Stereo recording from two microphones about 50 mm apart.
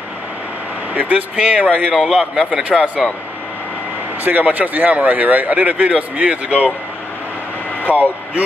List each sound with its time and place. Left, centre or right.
0.9 s speech: right
3.0 s speech: centre
4.2 s speech: right
7.9 s speech: right